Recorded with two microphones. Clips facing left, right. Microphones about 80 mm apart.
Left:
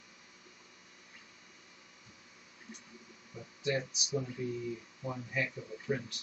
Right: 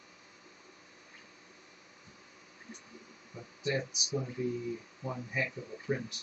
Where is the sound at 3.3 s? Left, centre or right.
Right.